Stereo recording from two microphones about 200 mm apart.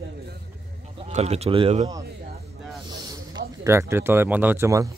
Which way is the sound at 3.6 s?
15° right (ahead or behind).